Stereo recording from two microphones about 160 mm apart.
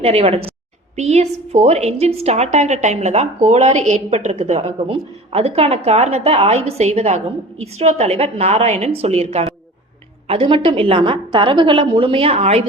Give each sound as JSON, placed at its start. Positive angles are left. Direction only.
{"t": 0.0, "sound": "a woman's voice", "side_deg": -40}